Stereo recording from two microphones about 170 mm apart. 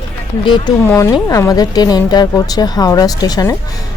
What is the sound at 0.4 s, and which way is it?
Speech, 30° left (ahead or behind).